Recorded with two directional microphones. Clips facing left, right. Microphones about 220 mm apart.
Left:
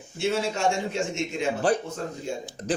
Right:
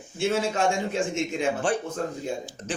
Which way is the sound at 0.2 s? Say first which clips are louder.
Right 1 dB; 50° right (ahead or behind).